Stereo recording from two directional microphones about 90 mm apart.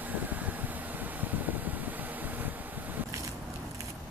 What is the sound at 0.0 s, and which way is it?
Vehicle, 20° right (ahead or behind).